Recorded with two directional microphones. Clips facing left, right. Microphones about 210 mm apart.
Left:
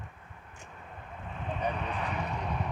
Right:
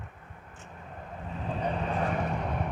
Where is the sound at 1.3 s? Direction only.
35° right (ahead or behind).